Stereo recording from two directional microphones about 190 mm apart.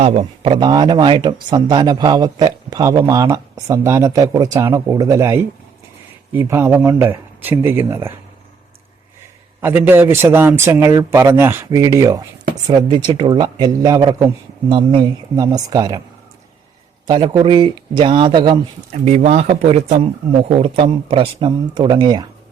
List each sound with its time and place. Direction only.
0.0 s a man's voice: 35° right (ahead or behind); by 8.2 s 15° right (ahead or behind)
9.6 s a man's voice: 10° right (ahead or behind)
17.1 s speech: 25° right (ahead or behind)
19.0 s speech: 35° right (ahead or behind)